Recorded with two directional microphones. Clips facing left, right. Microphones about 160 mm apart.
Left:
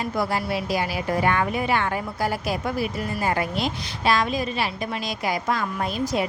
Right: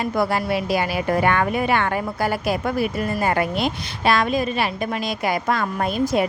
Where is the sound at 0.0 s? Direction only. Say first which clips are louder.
Right 4 dB; 60° right (ahead or behind).